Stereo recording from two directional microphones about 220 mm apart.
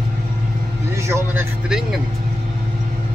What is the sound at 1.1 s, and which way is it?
Speech, 15° right (ahead or behind).